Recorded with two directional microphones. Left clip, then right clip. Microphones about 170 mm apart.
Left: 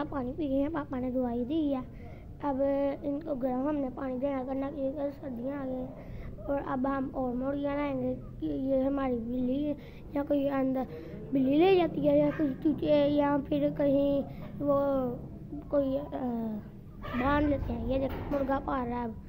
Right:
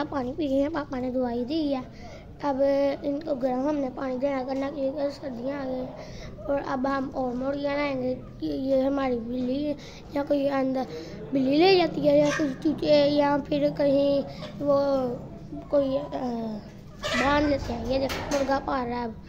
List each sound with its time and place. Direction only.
0.0 s a woman's voice: 25° right (ahead or behind)